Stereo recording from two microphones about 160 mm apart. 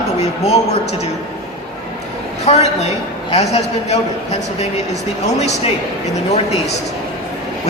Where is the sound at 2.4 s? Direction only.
40° left (ahead or behind).